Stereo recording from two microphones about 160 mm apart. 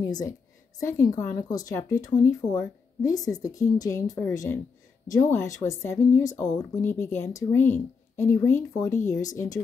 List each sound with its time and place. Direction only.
0.0 s a woman's voice: 25° left (ahead or behind)